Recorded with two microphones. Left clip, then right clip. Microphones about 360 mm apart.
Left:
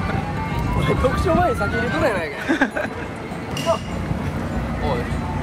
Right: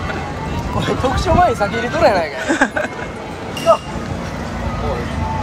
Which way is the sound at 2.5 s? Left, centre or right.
Centre.